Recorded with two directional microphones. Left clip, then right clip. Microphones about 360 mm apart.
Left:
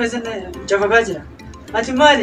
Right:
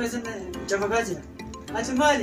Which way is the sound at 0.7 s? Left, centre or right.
Left.